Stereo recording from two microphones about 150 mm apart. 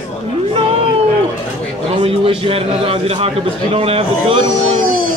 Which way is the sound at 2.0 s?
35° right (ahead or behind).